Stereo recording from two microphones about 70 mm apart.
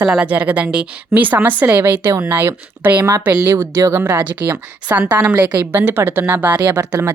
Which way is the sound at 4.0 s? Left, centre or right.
Right.